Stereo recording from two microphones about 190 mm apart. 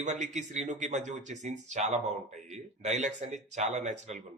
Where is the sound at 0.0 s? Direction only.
40° right (ahead or behind).